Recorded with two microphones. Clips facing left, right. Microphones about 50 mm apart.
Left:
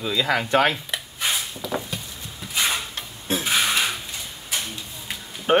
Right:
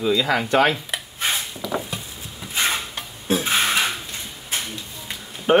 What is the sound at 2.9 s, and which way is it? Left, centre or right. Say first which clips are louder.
Dishes: right 4 dB; centre.